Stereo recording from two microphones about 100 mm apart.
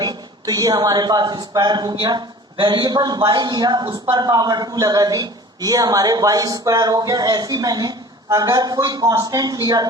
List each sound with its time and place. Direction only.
0.0 s a man's voice: 40° right (ahead or behind)